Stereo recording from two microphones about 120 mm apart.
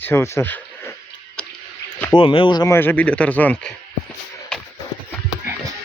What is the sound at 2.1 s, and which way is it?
Speech, 45° left (ahead or behind).